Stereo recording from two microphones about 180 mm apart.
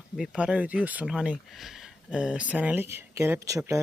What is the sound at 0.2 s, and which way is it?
Speech, 5° right (ahead or behind).